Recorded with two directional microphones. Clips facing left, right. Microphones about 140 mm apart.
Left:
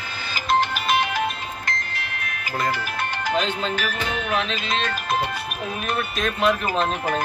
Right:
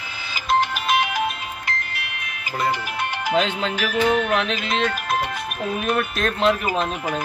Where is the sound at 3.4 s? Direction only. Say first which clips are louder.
Right 3 dB; 90° right.